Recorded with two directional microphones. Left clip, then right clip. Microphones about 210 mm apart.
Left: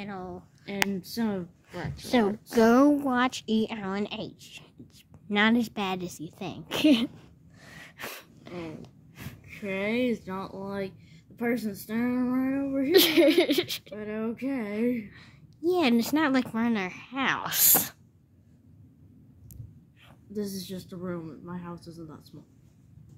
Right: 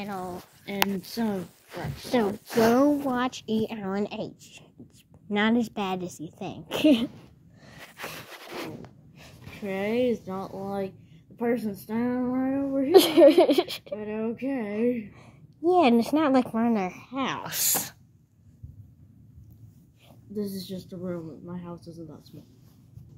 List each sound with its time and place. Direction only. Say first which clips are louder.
0.0 s speech: right 4 dB; 15° left (ahead or behind)
2.0 s speech: even; 65° left (ahead or behind)
2.7 s speech: left 1 dB; 40° left (ahead or behind)
3.6 s a woman's voice: right 2 dB; 15° left (ahead or behind)
7.6 s sneeze: right 1 dB; 35° left (ahead or behind)
9.6 s speech: right 2 dB; 25° left (ahead or behind)
20.3 s speech: right 1 dB; 25° left (ahead or behind)